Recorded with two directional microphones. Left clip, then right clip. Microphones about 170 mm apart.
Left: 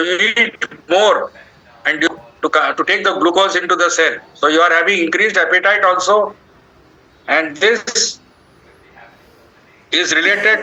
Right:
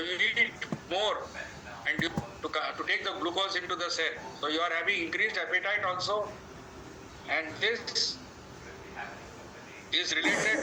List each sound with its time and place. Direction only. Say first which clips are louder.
0.0 s a man's voice: left 14 dB; 55° left (ahead or behind)
7.3 s a man's voice: left 17 dB; 55° left (ahead or behind)
9.9 s a man's voice: left 15 dB; 55° left (ahead or behind)